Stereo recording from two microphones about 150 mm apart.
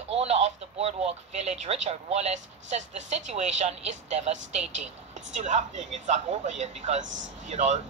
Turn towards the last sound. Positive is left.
turn(degrees=-50)  # may be behind; listen again after turning